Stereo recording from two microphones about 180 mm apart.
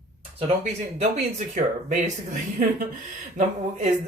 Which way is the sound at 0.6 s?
40° right (ahead or behind).